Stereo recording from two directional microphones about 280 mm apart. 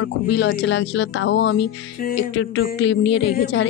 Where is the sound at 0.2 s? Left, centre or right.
Left.